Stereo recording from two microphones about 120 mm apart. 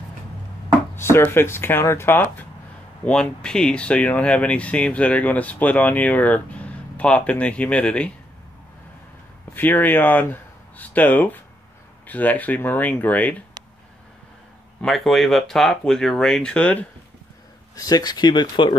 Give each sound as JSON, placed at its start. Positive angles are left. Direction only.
{"t": 0.9, "sound": "speech", "side_deg": 20}
{"t": 3.1, "sound": "speech", "side_deg": 5}
{"t": 9.5, "sound": "speech", "side_deg": 15}
{"t": 14.8, "sound": "speech", "side_deg": 0}
{"t": 17.7, "sound": "speech", "side_deg": 30}